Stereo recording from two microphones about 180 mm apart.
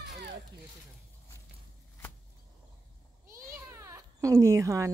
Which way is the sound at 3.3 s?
15° right (ahead or behind).